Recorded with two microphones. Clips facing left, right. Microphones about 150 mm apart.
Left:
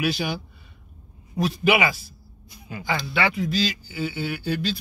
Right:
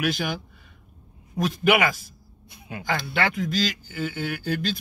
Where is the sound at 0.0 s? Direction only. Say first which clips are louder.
Left 1 dB; 50° right (ahead or behind).